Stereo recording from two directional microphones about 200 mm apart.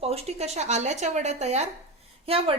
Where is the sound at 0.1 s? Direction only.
30° right (ahead or behind).